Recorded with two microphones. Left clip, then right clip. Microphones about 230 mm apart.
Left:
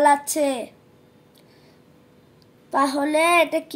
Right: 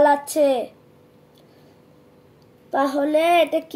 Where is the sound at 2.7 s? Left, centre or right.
Left.